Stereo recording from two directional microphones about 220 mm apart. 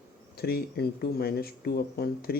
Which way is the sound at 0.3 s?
45° left (ahead or behind).